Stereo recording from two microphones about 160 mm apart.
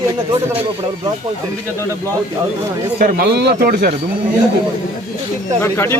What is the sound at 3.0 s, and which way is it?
Speech, 80° right.